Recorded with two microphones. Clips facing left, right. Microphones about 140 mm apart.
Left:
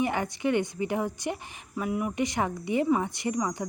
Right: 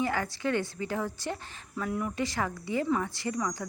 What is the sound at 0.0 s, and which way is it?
A woman's voice, 20° left (ahead or behind).